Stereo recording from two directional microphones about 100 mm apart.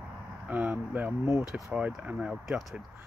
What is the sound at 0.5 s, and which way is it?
Speech, 15° right (ahead or behind).